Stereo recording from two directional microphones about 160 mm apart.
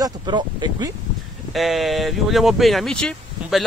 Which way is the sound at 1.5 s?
Centre (ahead or behind).